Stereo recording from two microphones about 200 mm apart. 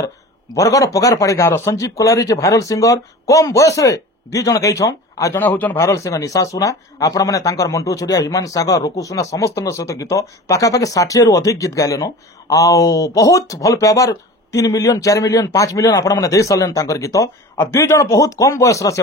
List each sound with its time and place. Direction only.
0.6 s speech: 15° left (ahead or behind)